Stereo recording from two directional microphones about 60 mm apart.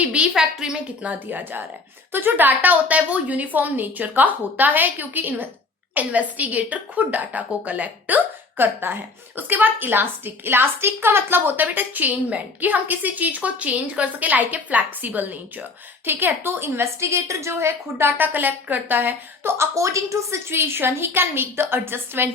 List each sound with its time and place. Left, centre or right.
0.0 s a sound: centre
0.3 s a woman's voice: centre
1.3 s a woman's voice: right
18.2 s a woman's voice: right
19.7 s a woman's voice: right